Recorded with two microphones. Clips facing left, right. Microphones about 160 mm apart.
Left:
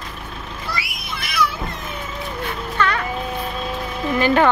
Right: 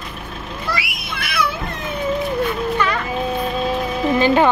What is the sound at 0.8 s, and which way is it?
Children playing, 60° right (ahead or behind).